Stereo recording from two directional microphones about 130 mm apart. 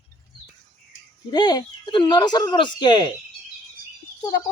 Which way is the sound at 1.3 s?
35° left (ahead or behind).